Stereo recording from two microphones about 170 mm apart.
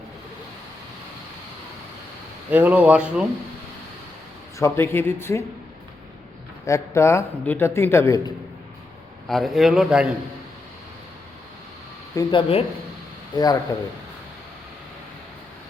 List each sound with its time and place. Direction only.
2.5 s speech: 10° right (ahead or behind)
4.5 s a man's voice: 15° left (ahead or behind)
6.7 s a man's voice: 15° left (ahead or behind)
9.2 s a man's voice: centre (ahead or behind)
12.1 s speech: 30° left (ahead or behind)
13.3 s speech: 20° left (ahead or behind)